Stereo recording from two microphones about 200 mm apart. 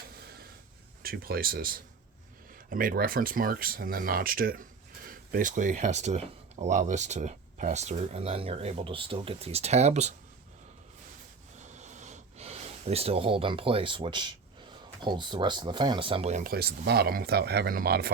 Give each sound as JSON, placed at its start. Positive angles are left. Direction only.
{"t": 1.0, "sound": "speech", "side_deg": -50}
{"t": 11.6, "sound": "sniff", "side_deg": -35}
{"t": 15.0, "sound": "speech", "side_deg": -20}